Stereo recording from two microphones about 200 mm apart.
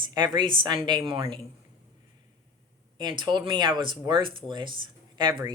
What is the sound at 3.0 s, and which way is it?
Speech, 20° right (ahead or behind).